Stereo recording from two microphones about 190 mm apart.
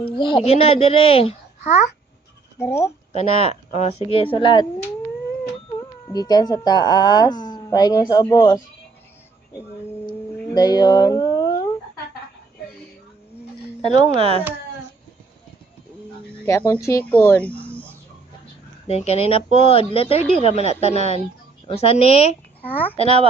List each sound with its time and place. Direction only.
0.0 s speech: 25° left (ahead or behind)
2.6 s speech: 15° left (ahead or behind)
3.1 s speech: 35° left (ahead or behind)
5.8 s speech: 20° left (ahead or behind)
10.3 s a sound: 20° left (ahead or behind)
13.9 s speech: 30° right (ahead or behind)
16.5 s speech: 15° left (ahead or behind)
18.9 s speech: 35° left (ahead or behind)
22.6 s speech: 10° left (ahead or behind)
23.0 s speech: 30° left (ahead or behind)